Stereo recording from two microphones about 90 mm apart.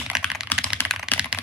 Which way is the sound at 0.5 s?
20° left (ahead or behind).